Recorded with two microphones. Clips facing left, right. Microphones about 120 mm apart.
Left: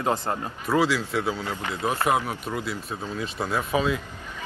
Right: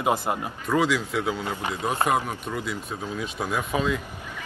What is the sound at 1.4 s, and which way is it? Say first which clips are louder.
Speech: even; 20° right (ahead or behind).